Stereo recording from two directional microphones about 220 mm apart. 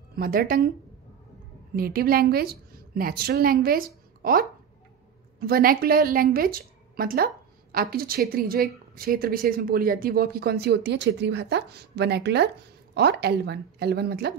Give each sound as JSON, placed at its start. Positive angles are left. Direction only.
{"t": 0.1, "sound": "speech", "side_deg": -40}
{"t": 1.8, "sound": "a woman's voice", "side_deg": -40}